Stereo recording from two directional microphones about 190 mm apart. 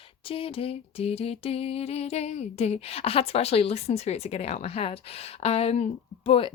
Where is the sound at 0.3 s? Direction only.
30° left (ahead or behind).